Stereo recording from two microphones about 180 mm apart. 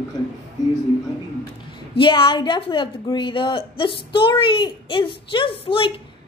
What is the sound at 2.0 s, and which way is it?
A child's voice, 25° left (ahead or behind).